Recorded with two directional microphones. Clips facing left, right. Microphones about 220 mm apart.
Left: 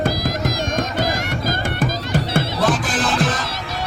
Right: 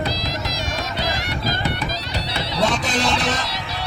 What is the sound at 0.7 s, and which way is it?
Run, 50° left (ahead or behind).